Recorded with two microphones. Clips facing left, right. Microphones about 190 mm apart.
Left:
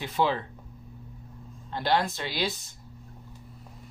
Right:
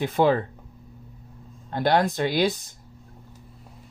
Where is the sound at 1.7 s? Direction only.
50° right (ahead or behind).